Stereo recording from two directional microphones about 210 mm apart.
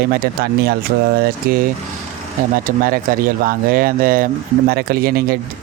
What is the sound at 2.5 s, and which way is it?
Speech, 40° right (ahead or behind).